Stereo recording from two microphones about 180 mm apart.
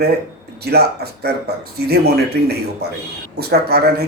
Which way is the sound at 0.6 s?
60° right (ahead or behind).